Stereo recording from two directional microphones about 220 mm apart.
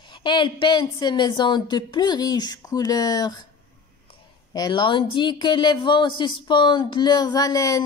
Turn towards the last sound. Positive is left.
turn(degrees=15)  # may be behind; listen again after turning